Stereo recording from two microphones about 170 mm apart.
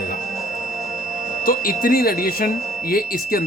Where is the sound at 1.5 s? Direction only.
55° left (ahead or behind).